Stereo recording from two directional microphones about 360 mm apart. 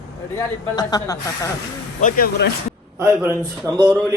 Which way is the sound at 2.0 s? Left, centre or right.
Left.